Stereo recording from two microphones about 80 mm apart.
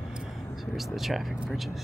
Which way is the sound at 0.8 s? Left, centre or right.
Centre.